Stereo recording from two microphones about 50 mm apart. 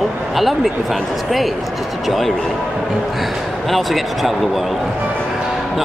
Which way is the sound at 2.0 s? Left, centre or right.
Centre.